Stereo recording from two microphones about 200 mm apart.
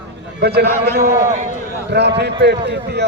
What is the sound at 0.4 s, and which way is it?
A man's voice, 55° right (ahead or behind).